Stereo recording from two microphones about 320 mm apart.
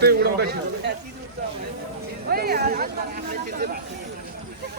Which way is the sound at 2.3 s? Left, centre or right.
Right.